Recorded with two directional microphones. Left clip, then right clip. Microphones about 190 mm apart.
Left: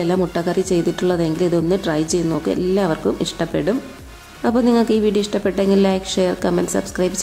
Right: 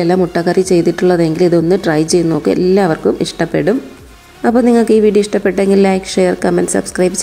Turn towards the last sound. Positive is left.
turn(degrees=-20)  # may be behind; listen again after turning